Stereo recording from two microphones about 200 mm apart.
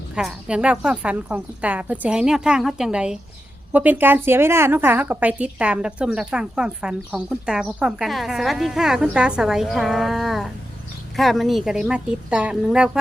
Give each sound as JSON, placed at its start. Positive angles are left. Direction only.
{"t": 0.1, "sound": "a woman's voice", "side_deg": -5}